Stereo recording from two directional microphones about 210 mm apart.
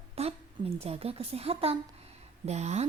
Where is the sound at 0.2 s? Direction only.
30° right (ahead or behind).